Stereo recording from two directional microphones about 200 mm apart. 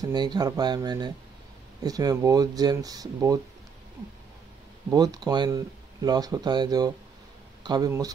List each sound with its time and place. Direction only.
0.0 s speech: 20° right (ahead or behind)
4.9 s speech: 20° right (ahead or behind)